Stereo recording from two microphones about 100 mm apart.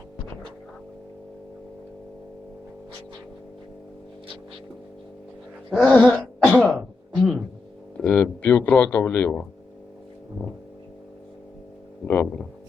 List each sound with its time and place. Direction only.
5.9 s throat clearing: 15° left (ahead or behind)
6.7 s throat clearing: 5° right (ahead or behind)
7.9 s speech: 15° left (ahead or behind)
12.0 s speech: 15° left (ahead or behind)